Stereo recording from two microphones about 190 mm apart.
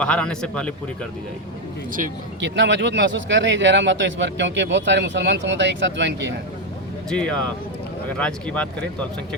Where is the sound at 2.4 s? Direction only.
70° right (ahead or behind).